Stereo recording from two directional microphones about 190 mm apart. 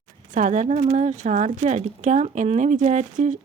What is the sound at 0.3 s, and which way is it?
Speech, 40° right (ahead or behind).